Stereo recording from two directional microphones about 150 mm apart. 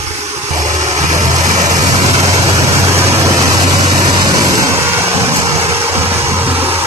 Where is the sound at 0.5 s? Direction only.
55° right (ahead or behind).